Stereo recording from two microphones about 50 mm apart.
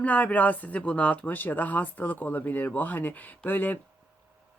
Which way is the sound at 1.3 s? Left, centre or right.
Left.